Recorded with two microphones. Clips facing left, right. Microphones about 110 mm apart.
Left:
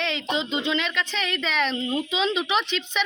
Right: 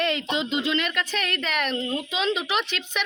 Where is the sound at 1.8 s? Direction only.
5° left (ahead or behind).